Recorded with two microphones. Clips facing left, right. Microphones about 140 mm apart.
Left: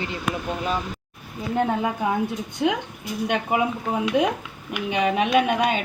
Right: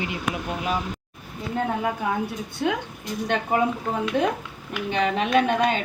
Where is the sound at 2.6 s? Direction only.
15° left (ahead or behind).